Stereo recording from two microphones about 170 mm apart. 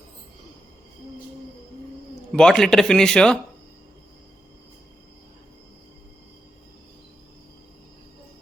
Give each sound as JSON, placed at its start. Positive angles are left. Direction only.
{"t": 2.3, "sound": "speech", "side_deg": 5}